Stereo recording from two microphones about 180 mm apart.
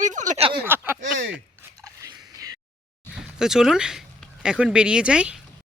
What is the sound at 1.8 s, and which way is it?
Biting, 20° right (ahead or behind).